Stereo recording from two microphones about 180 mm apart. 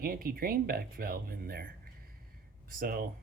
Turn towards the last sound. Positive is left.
turn(degrees=-55)  # may be behind; listen again after turning